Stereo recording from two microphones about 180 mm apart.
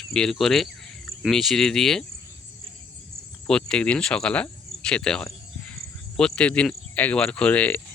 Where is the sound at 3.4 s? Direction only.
5° left (ahead or behind).